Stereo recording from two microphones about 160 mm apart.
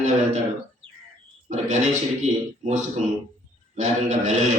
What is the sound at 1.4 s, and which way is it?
A man's voice, 45° right (ahead or behind).